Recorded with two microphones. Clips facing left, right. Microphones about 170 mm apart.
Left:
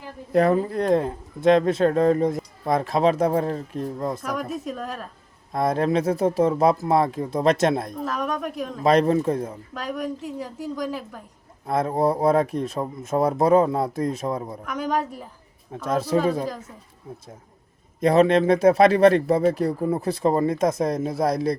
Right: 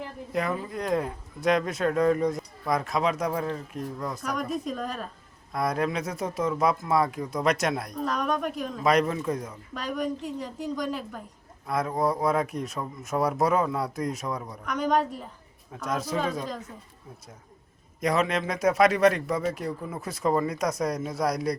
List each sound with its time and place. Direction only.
0.3 s speech: 40° left (ahead or behind)
4.2 s a woman's voice: 5° left (ahead or behind)
5.5 s speech: 30° left (ahead or behind)
8.0 s a woman's voice: centre (ahead or behind)
8.8 s speech: 30° left (ahead or behind)
9.7 s a woman's voice: centre (ahead or behind)
11.6 s speech: 30° left (ahead or behind)
14.6 s a woman's voice: 5° left (ahead or behind)
15.7 s speech: 30° left (ahead or behind)
18.0 s speech: 30° left (ahead or behind)